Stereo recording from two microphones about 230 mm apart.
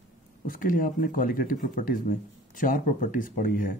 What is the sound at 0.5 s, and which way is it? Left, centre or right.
Speech, left.